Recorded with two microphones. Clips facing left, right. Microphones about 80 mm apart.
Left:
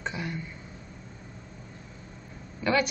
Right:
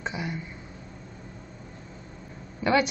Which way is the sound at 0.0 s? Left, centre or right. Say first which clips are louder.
Right 1 dB; centre.